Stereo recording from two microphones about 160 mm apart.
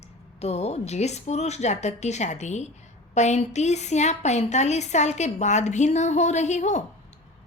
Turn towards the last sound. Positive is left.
turn(degrees=45)  # may be behind; listen again after turning